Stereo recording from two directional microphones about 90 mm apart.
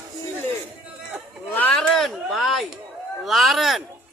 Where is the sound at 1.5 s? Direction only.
20° left (ahead or behind).